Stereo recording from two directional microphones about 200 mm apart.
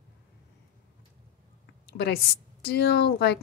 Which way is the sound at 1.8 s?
55° left (ahead or behind).